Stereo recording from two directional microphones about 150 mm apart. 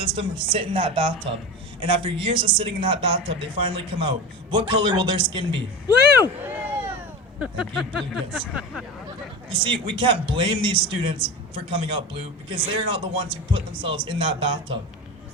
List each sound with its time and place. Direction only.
0.0 s speech: 35° right (ahead or behind)
6.2 s a sound: 15° right (ahead or behind)
7.3 s speech: 5° right (ahead or behind)
9.5 s speech: 35° right (ahead or behind)